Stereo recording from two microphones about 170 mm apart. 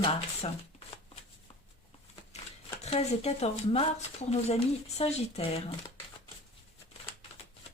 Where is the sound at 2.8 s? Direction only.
40° left (ahead or behind).